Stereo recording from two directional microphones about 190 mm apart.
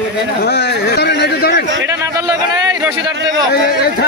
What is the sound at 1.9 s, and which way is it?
A man's voice, 15° right (ahead or behind).